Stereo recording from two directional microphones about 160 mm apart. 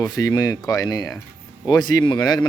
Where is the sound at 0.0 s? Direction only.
20° left (ahead or behind).